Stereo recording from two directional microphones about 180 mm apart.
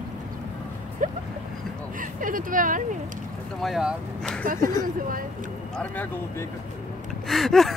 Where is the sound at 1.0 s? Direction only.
50° right (ahead or behind).